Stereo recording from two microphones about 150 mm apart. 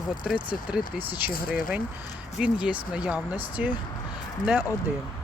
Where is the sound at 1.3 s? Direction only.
70° left (ahead or behind).